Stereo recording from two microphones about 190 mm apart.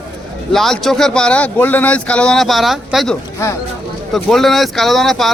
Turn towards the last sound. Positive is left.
turn(degrees=0)  # may be behind; listen again after turning